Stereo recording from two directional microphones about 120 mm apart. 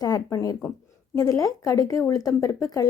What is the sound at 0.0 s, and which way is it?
A woman's voice, 30° left (ahead or behind).